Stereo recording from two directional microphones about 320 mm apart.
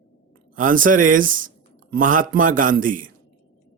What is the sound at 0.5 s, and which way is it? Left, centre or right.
Speech, right.